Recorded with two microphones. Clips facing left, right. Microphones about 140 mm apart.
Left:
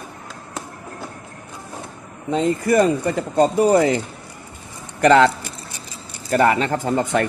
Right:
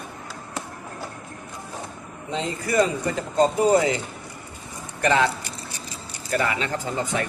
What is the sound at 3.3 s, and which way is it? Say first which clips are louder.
Speech: left 3 dB; 60° left (ahead or behind).